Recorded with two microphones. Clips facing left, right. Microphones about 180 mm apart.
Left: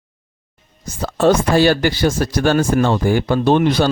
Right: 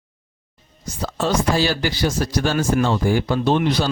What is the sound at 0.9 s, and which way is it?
Speech, 55° left (ahead or behind).